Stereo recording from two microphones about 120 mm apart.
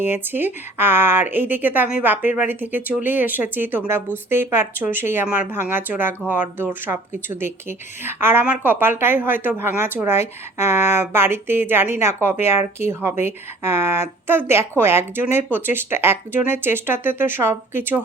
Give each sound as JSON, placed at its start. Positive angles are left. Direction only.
{"t": 0.0, "sound": "speech", "side_deg": -15}